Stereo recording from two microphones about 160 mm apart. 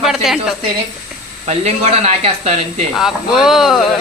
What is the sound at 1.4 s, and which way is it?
Speech, 45° right (ahead or behind).